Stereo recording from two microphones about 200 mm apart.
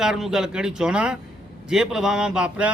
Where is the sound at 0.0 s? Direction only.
Centre (ahead or behind).